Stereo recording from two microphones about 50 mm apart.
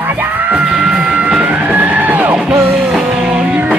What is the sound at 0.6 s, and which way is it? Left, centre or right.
Music, centre.